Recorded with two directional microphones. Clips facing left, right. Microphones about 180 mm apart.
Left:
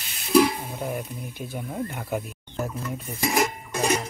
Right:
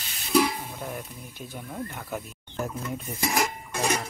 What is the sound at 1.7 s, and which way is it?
Speech, 15° left (ahead or behind).